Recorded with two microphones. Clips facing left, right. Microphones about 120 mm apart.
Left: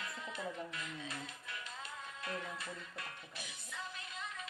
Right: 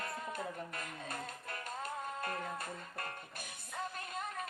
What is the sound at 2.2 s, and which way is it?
Music, 50° right (ahead or behind).